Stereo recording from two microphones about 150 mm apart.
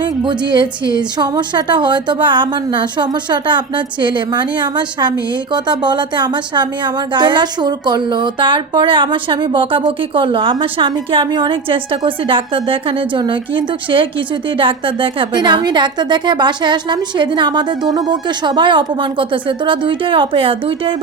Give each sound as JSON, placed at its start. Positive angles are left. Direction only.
{"t": 0.0, "sound": "a woman's voice", "side_deg": -30}